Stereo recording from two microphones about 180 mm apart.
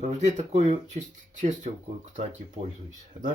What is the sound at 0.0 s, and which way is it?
Speech, 40° right (ahead or behind).